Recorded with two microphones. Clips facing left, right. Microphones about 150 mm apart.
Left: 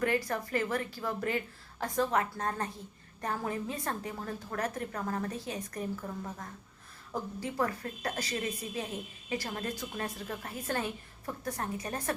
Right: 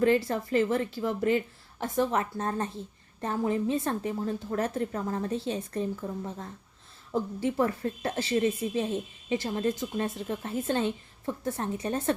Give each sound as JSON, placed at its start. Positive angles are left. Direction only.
{"t": 0.0, "sound": "a woman's voice", "side_deg": -25}
{"t": 7.1, "sound": "a woman's voice", "side_deg": -20}